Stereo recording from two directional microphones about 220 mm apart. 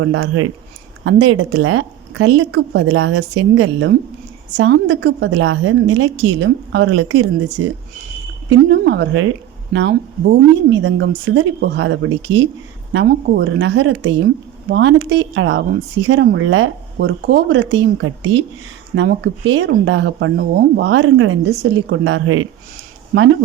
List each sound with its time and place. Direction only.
0.0 s a woman's voice: 60° right (ahead or behind)
8.4 s a woman's voice: 50° right (ahead or behind)
13.1 s a woman's voice: 45° right (ahead or behind)
17.6 s a woman's voice: 60° right (ahead or behind)
21.6 s a woman's voice: 50° right (ahead or behind)
23.1 s speech: 45° right (ahead or behind)